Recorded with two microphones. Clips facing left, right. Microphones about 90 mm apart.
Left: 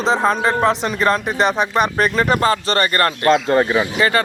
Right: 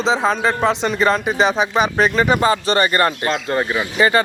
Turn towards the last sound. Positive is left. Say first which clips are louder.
# even
turn(degrees=-5)  # may be behind; listen again after turning